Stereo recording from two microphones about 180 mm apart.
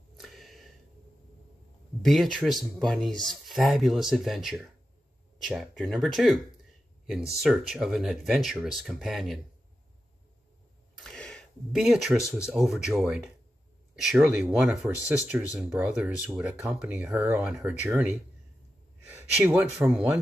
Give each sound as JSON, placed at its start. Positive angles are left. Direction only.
{"t": 0.2, "sound": "a sound", "side_deg": 0}
{"t": 2.0, "sound": "speech", "side_deg": 0}
{"t": 7.4, "sound": "speech", "side_deg": -5}
{"t": 11.1, "sound": "a sound", "side_deg": 5}
{"t": 12.2, "sound": "speech", "side_deg": 15}
{"t": 12.4, "sound": "speech", "side_deg": -5}